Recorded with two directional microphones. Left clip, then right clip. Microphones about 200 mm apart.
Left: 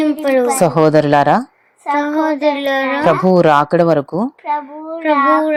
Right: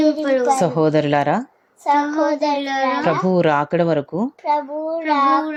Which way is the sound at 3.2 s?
10° left (ahead or behind).